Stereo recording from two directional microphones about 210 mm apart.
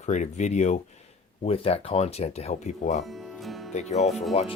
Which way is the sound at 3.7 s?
30° left (ahead or behind).